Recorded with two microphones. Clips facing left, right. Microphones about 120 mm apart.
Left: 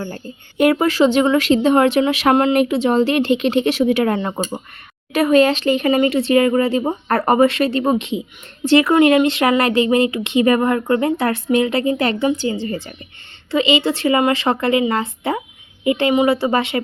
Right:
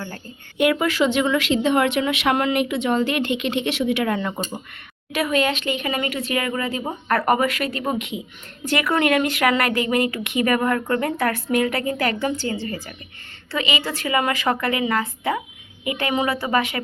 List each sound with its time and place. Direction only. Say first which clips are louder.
0.5 s speech: left 5 dB; 40° left (ahead or behind)